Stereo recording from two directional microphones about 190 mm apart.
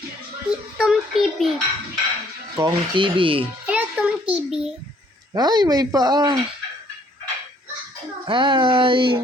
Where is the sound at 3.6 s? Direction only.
5° right (ahead or behind).